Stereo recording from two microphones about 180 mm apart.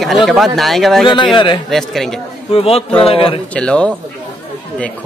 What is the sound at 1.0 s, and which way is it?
Speech, 25° left (ahead or behind).